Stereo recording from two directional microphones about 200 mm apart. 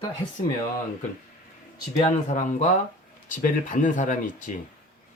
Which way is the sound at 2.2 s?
40° left (ahead or behind).